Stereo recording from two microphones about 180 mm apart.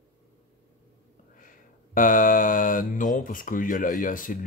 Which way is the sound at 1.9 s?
50° left (ahead or behind).